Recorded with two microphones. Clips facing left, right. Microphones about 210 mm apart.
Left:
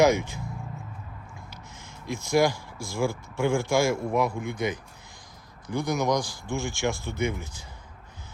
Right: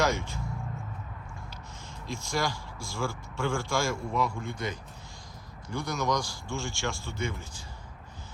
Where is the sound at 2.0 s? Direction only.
15° left (ahead or behind).